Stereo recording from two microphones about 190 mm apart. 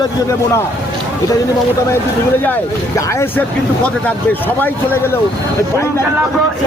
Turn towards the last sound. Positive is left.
turn(degrees=10)  # may be behind; listen again after turning